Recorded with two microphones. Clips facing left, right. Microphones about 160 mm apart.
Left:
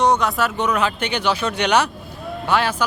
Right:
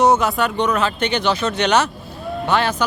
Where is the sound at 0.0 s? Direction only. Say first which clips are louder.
Right 2 dB; 5° right (ahead or behind).